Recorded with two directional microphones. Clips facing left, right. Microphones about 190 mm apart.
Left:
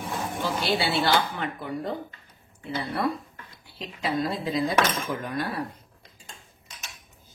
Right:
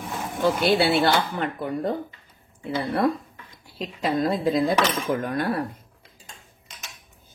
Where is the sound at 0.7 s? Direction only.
55° right (ahead or behind).